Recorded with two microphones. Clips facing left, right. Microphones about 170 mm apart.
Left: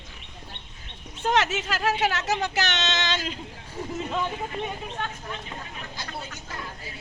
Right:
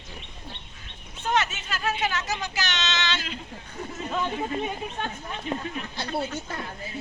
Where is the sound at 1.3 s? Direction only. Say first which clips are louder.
Left 2 dB; 90° left.